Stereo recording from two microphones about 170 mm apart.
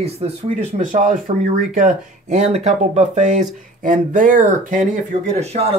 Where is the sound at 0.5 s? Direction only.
45° right (ahead or behind).